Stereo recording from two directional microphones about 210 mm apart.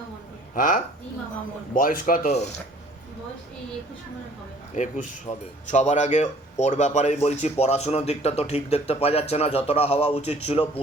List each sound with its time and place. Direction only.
0.5 s speech: 40° left (ahead or behind)
4.7 s speech: 35° left (ahead or behind)